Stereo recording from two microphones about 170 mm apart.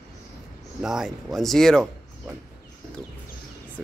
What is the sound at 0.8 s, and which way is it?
Speech, 5° right (ahead or behind).